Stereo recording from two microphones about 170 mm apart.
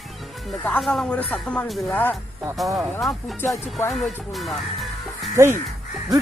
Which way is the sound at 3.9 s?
Centre (ahead or behind).